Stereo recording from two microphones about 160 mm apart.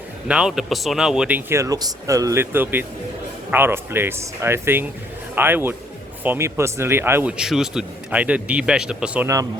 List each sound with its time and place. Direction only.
0.3 s speech: 5° right (ahead or behind)
1.5 s a man's voice: 20° right (ahead or behind)
9.2 s speech: 20° right (ahead or behind)